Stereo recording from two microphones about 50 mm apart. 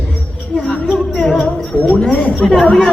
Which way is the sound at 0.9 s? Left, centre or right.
Centre.